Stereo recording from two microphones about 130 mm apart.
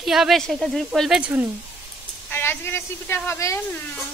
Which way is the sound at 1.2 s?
15° right (ahead or behind).